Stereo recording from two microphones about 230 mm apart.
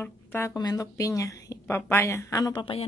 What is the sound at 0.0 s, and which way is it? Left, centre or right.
A woman's voice, centre.